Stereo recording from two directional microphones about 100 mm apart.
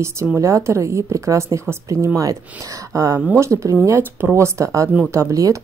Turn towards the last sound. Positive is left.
turn(degrees=-35)  # may be behind; listen again after turning